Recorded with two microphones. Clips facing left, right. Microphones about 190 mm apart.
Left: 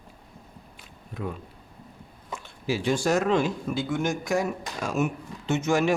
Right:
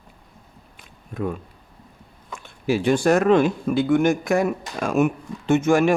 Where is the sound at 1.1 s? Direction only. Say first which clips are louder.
Right 7 dB; 50° right (ahead or behind).